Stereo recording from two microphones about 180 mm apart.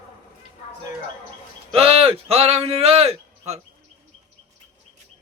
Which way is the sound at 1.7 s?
30° right (ahead or behind).